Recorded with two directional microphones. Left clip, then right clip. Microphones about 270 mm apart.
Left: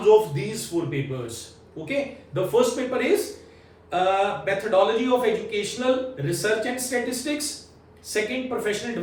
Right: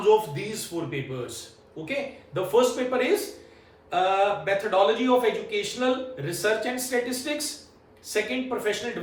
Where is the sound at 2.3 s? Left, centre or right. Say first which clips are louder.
Left 1 dB; centre.